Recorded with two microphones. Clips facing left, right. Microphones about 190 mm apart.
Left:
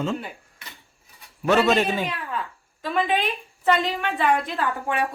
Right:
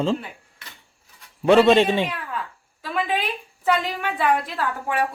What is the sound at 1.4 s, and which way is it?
Speech, 30° right (ahead or behind).